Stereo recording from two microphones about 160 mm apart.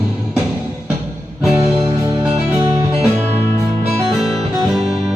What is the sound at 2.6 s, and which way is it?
Music, 35° right (ahead or behind).